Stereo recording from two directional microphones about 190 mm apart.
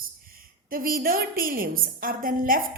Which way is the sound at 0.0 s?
50° right (ahead or behind).